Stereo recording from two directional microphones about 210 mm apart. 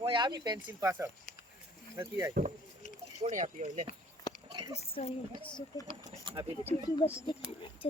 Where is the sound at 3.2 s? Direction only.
35° right (ahead or behind).